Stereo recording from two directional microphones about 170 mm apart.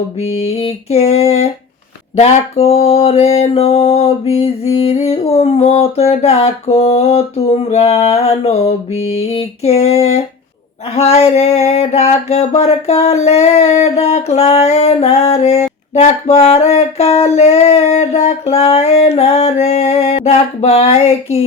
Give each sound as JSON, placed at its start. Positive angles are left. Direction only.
{"t": 0.2, "sound": "mantra", "side_deg": 40}